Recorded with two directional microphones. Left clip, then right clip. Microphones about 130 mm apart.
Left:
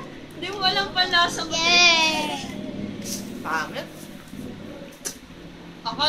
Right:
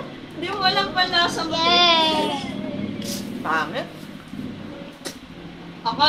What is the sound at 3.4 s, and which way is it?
Speech, 40° right (ahead or behind).